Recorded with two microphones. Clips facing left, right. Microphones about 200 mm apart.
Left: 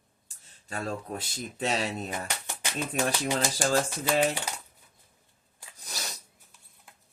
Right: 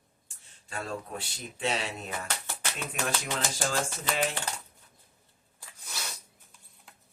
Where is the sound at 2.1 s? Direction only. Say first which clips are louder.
Left 1 dB; 15° left (ahead or behind).